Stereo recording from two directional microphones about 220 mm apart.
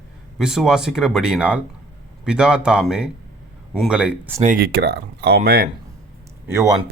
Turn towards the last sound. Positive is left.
turn(degrees=-15)  # may be behind; listen again after turning